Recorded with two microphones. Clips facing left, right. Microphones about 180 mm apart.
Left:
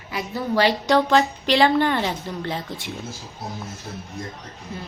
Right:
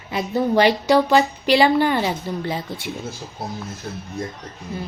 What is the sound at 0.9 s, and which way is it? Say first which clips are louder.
A woman's voice: right 2 dB; centre (ahead or behind).